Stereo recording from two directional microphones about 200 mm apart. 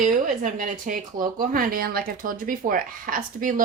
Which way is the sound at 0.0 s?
40° right (ahead or behind).